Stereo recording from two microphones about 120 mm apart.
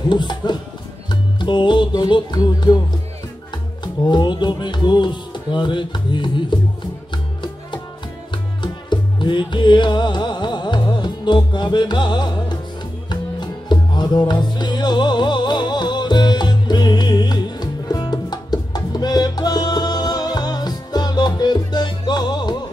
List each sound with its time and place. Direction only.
0.1 s speech: 40° left (ahead or behind)
1.0 s music: 40° left (ahead or behind)
3.8 s speech: 40° left (ahead or behind)
8.9 s music: 40° left (ahead or behind)